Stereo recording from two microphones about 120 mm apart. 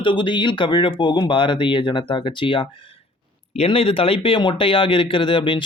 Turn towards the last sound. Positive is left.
turn(degrees=45)  # may be behind; listen again after turning